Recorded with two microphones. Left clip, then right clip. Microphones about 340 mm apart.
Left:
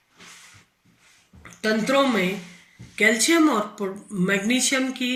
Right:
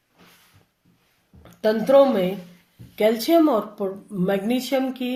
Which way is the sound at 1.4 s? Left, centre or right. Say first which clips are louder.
Right 3 dB; centre.